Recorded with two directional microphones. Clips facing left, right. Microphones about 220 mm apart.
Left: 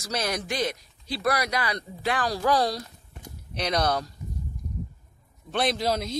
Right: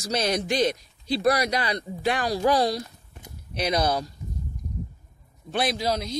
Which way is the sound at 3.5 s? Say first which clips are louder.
Right 2 dB; 5° right (ahead or behind).